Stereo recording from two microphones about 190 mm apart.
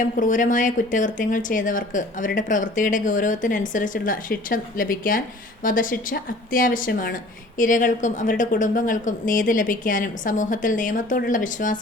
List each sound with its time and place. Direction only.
0.0 s speech: 40° left (ahead or behind)